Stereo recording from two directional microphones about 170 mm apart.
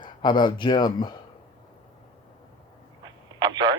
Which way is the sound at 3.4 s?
25° right (ahead or behind).